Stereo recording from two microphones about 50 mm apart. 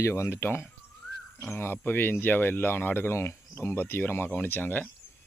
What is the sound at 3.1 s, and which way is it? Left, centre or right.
Speech, left.